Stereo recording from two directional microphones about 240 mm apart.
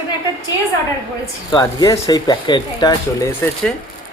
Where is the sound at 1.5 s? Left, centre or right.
Centre.